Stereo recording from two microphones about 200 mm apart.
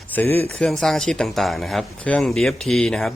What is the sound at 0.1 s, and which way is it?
Speech, 10° left (ahead or behind).